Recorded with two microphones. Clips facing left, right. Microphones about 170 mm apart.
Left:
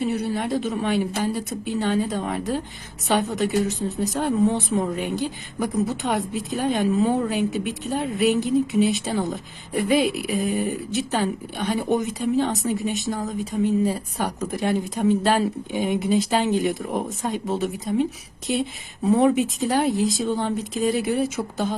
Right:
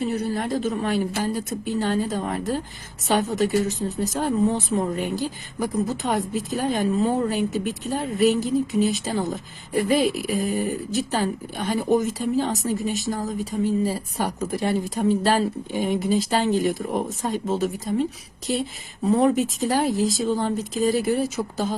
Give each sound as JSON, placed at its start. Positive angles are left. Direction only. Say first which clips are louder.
{"t": 0.1, "sound": "a woman's voice", "louder": "left 1 dB", "side_deg": 0}
{"t": 19.0, "sound": "a woman's voice", "louder": "left 1 dB", "side_deg": 0}